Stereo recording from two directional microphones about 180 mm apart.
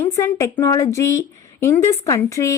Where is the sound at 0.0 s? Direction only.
15° left (ahead or behind).